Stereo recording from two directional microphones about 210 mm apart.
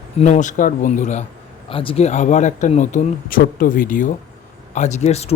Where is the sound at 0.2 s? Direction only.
35° left (ahead or behind).